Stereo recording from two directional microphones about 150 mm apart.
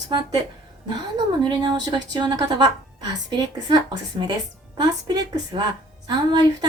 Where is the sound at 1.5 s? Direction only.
30° right (ahead or behind).